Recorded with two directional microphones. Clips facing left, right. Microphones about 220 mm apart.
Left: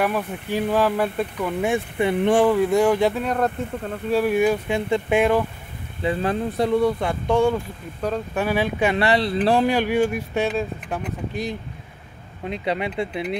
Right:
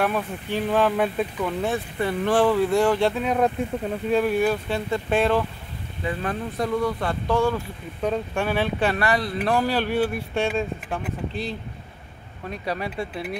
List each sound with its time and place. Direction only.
0.0 s speech: 5° left (ahead or behind)
1.6 s speech: 15° left (ahead or behind)
3.2 s speech: 10° right (ahead or behind)
4.1 s speech: 5° left (ahead or behind)
6.0 s speech: 25° left (ahead or behind)
7.0 s speech: 15° left (ahead or behind)
8.0 s speech: 5° left (ahead or behind)
8.9 s speech: 25° left (ahead or behind)
9.7 s speech: 15° left (ahead or behind)
12.4 s speech: 20° left (ahead or behind)